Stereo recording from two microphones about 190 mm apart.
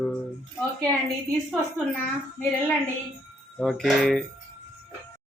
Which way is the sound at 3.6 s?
5° left (ahead or behind).